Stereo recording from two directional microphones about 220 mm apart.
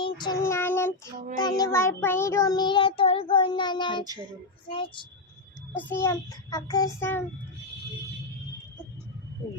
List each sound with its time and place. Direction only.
0.0 s child singing: 20° left (ahead or behind)
5.9 s child singing: 10° left (ahead or behind)